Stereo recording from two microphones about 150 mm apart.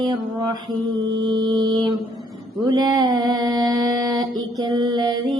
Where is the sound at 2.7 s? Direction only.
25° right (ahead or behind).